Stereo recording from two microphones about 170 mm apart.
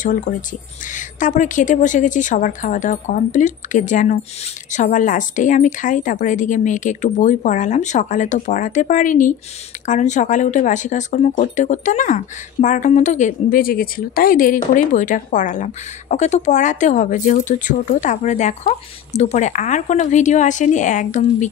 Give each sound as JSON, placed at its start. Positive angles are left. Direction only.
{"t": 0.0, "sound": "speech", "side_deg": 50}